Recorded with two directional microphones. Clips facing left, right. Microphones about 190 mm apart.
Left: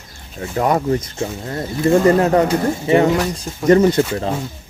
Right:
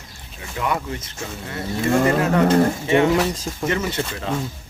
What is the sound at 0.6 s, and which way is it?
Speech, 40° left (ahead or behind).